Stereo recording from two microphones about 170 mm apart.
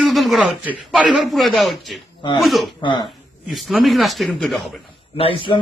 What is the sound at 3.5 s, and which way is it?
Speech, centre (ahead or behind).